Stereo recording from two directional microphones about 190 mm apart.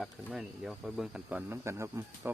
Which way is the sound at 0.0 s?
Centre (ahead or behind).